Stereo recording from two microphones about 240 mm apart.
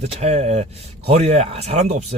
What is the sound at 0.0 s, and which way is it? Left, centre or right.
Speech, right.